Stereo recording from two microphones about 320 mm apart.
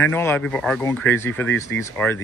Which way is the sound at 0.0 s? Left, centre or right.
Centre.